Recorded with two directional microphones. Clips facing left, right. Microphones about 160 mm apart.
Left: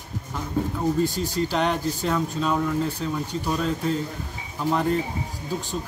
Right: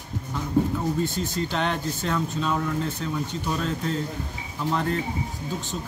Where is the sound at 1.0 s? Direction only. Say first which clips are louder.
Left 2 dB; 40° left (ahead or behind).